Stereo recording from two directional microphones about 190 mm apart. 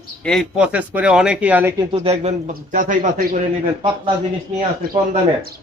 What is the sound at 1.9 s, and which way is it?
Speech, 35° right (ahead or behind).